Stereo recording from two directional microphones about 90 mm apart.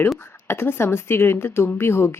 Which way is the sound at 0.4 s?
25° left (ahead or behind).